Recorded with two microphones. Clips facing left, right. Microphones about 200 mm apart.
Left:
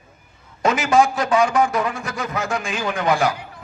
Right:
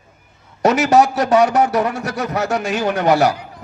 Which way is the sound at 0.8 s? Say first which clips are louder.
Right 2 dB; 40° right (ahead or behind).